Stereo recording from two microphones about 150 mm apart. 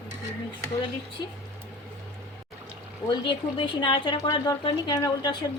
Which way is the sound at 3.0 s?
30° left (ahead or behind).